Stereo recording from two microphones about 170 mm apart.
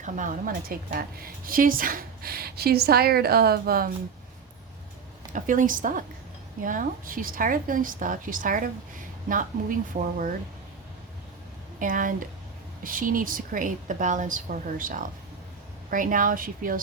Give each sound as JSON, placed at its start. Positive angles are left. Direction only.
{"t": 0.0, "sound": "a woman's voice", "side_deg": -50}
{"t": 5.3, "sound": "a woman's voice", "side_deg": -50}
{"t": 11.8, "sound": "a woman's voice", "side_deg": -50}